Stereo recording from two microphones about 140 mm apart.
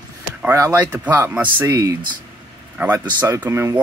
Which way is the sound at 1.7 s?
25° right (ahead or behind).